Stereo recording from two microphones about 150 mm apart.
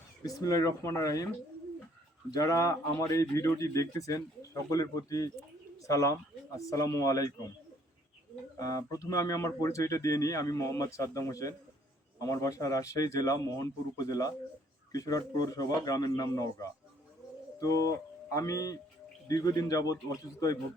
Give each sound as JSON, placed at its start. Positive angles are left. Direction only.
{"t": 0.3, "sound": "speech", "side_deg": 25}
{"t": 2.3, "sound": "speech", "side_deg": 20}
{"t": 8.5, "sound": "speech", "side_deg": 25}